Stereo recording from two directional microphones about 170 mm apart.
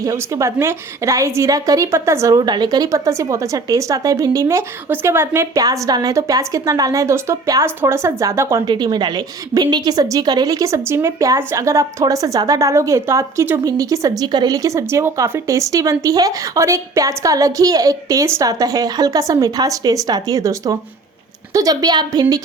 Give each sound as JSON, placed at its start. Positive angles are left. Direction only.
{"t": 0.0, "sound": "a woman's voice", "side_deg": -20}